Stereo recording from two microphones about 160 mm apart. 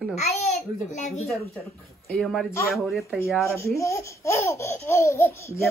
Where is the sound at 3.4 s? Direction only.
15° left (ahead or behind).